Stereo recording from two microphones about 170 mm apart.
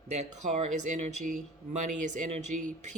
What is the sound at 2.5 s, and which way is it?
Speech, 50° right (ahead or behind).